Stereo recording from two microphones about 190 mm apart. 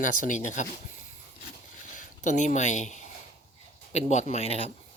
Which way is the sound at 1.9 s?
40° left (ahead or behind).